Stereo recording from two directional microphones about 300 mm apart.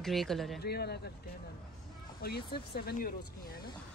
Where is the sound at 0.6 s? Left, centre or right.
Left.